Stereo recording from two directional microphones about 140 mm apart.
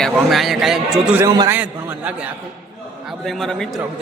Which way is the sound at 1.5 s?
15° right (ahead or behind).